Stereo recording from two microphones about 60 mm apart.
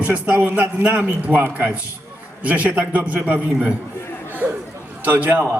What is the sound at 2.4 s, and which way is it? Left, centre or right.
Speech, right.